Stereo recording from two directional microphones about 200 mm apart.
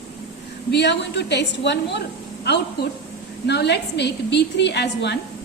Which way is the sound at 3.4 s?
55° left (ahead or behind).